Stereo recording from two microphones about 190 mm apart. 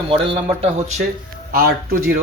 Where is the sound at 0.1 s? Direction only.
30° right (ahead or behind).